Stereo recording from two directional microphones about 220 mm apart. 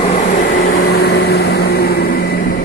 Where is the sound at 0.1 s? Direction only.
40° left (ahead or behind).